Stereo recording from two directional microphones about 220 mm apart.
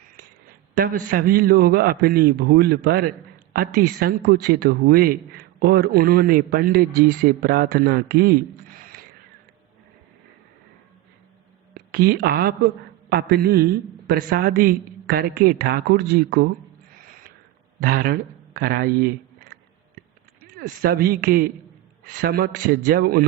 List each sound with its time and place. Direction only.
0.8 s a man's voice: 40° right (ahead or behind)
11.7 s a man's voice: 45° right (ahead or behind)
17.7 s a man's voice: 40° right (ahead or behind)
20.0 s a sound: 45° right (ahead or behind)
22.1 s a man's voice: 45° right (ahead or behind)